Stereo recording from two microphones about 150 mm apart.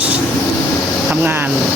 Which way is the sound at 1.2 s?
10° right (ahead or behind).